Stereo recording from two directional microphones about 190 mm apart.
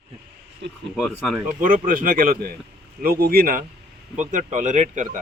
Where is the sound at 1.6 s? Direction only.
45° right (ahead or behind).